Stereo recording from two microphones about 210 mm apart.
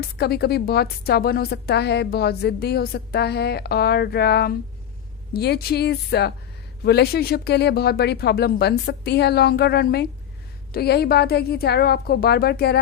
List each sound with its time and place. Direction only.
0.0 s a woman's voice: 50° left (ahead or behind)